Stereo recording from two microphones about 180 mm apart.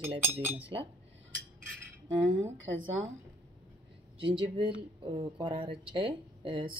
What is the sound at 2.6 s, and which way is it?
Speech, 90° right.